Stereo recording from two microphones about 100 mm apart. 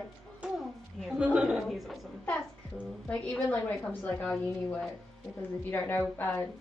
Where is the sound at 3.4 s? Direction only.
20° left (ahead or behind).